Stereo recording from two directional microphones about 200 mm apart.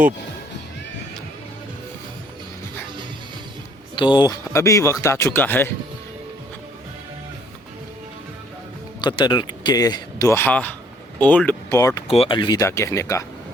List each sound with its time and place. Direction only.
3.9 s speech: 25° left (ahead or behind)
9.0 s speech: 20° left (ahead or behind)
12.0 s speech: 30° left (ahead or behind)